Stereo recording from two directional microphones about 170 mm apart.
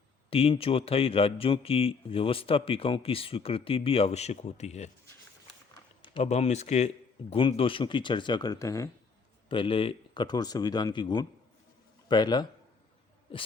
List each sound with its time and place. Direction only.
0.3 s a man's voice: 35° left (ahead or behind)
6.2 s a man's voice: 40° left (ahead or behind); by 8.9 s 20° left (ahead or behind)
9.5 s speech: 30° left (ahead or behind)